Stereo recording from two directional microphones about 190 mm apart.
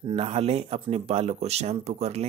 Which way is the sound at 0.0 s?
30° right (ahead or behind).